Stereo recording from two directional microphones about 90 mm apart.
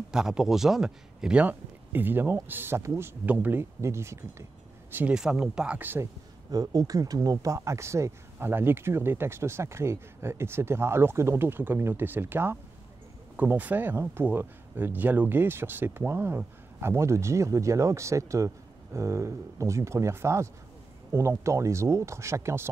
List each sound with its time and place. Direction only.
0.1 s speech: 5° right (ahead or behind)
3.8 s speech: 30° right (ahead or behind)
5.1 s speech: 5° right (ahead or behind)
6.5 s speech: 45° right (ahead or behind)